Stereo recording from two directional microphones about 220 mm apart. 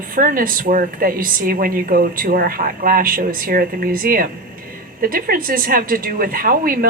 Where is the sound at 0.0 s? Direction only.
40° right (ahead or behind).